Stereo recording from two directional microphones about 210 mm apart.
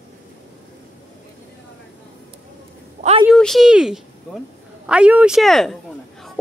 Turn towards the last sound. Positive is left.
turn(degrees=0)  # may be behind; listen again after turning